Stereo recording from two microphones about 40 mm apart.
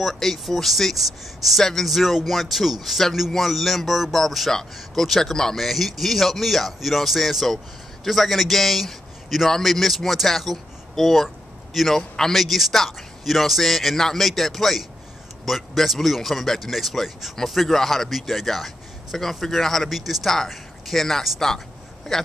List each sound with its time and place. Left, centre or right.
0.0 s speech: centre
1.9 s speech: centre
5.6 s speech: centre
11.2 s a sound: centre
11.9 s speech: centre
20.0 s speech: centre